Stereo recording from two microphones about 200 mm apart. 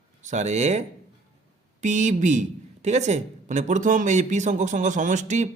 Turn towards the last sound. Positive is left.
turn(degrees=-35)  # may be behind; listen again after turning